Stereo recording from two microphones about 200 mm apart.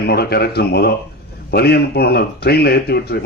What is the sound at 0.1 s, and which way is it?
A man's voice, 55° left (ahead or behind).